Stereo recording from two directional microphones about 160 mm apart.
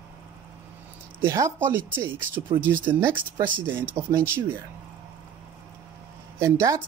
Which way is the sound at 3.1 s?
30° right (ahead or behind).